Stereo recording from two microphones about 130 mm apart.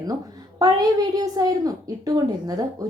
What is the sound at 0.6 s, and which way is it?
A woman's voice, 30° right (ahead or behind).